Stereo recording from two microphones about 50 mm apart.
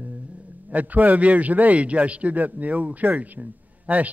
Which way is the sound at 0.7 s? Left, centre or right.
Right.